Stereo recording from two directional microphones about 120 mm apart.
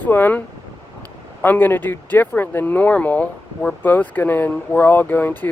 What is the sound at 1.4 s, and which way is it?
Speech, 15° left (ahead or behind).